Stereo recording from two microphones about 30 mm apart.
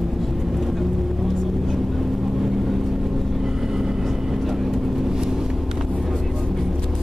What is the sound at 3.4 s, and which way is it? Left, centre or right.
Vehicle, centre.